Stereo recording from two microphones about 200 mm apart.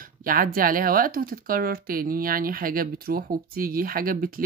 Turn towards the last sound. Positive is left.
turn(degrees=-45)  # may be behind; listen again after turning